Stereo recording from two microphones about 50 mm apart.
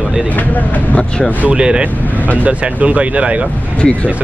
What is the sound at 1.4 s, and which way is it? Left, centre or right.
Speech, centre.